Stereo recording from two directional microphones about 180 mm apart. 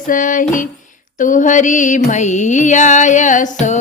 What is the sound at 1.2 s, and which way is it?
Music, 45° left (ahead or behind).